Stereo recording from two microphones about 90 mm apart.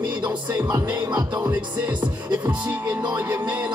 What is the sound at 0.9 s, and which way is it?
Music, 45° right (ahead or behind).